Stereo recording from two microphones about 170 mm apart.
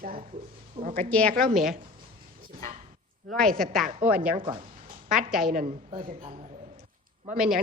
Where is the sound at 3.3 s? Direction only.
5° left (ahead or behind).